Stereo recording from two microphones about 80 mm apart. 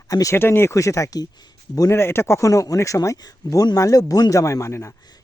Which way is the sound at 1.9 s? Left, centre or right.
Left.